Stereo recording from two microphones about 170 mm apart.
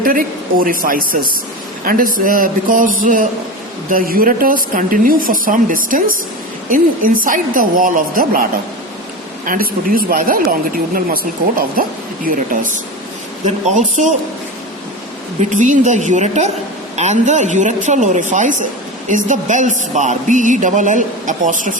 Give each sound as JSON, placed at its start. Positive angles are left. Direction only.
{"t": 0.0, "sound": "a woman's voice", "side_deg": -55}
{"t": 9.5, "sound": "speech", "side_deg": -60}
{"t": 13.4, "sound": "a woman's voice", "side_deg": -45}
{"t": 15.4, "sound": "a woman's voice", "side_deg": -45}